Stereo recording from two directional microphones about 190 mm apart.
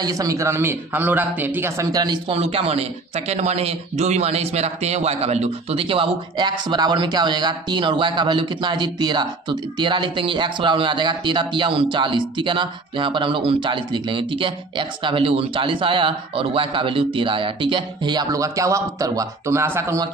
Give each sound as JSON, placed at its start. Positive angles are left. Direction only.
{"t": 0.0, "sound": "a man's voice", "side_deg": -20}